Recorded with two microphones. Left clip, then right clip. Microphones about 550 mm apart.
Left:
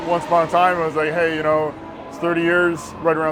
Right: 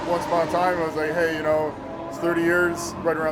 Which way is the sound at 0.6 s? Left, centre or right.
Left.